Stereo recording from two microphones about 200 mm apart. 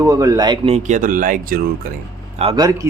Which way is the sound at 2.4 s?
25° right (ahead or behind).